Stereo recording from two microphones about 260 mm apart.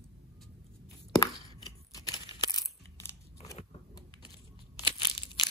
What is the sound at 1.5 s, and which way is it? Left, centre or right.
Coin, centre.